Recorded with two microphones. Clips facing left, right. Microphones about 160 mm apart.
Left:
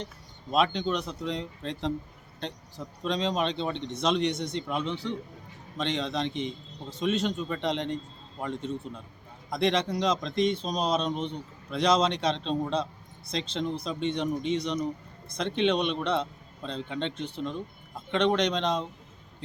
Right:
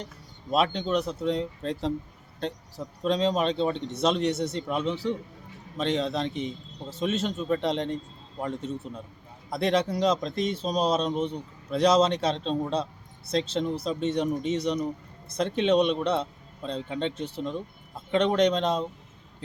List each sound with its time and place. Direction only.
0.5 s speech: centre (ahead or behind)